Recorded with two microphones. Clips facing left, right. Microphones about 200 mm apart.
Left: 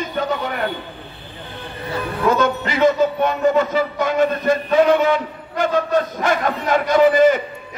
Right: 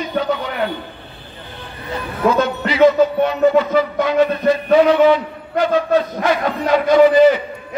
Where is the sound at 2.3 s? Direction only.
50° left (ahead or behind).